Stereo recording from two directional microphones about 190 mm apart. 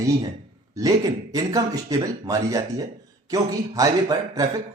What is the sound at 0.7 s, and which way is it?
Speech, 20° right (ahead or behind).